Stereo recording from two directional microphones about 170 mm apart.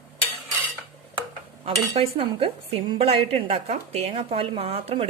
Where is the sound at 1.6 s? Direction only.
35° right (ahead or behind).